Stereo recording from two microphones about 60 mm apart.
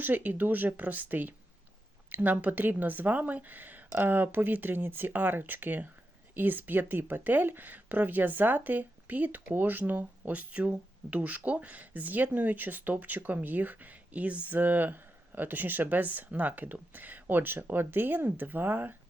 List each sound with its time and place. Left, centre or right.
0.0 s speech: right